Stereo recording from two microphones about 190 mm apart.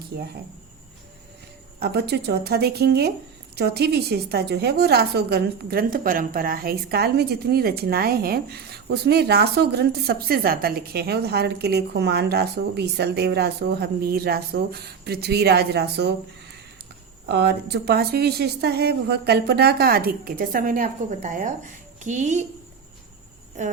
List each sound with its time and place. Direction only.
1.8 s a woman's voice: 60° right (ahead or behind)
17.3 s a woman's voice: 60° right (ahead or behind); by 22.4 s 40° right (ahead or behind)